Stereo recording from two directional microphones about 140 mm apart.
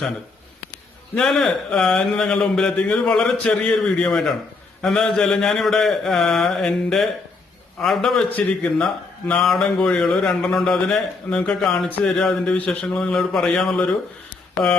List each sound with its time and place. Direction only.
1.1 s a man's voice: 5° left (ahead or behind)